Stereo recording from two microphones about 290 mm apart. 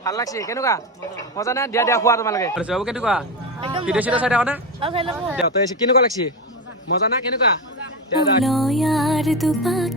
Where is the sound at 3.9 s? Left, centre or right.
Centre.